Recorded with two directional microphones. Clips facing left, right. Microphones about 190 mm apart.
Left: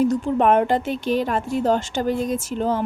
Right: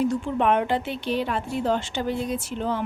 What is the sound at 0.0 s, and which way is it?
A woman's voice, 40° left (ahead or behind).